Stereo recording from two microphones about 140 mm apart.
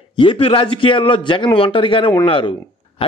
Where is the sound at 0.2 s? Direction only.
40° left (ahead or behind).